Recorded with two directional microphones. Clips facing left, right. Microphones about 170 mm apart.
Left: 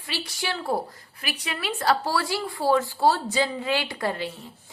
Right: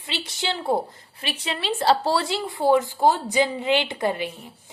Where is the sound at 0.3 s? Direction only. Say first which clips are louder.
Right 4 dB; 25° right (ahead or behind).